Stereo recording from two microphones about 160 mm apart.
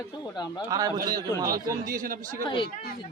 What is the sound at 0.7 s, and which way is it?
Speech, 25° right (ahead or behind).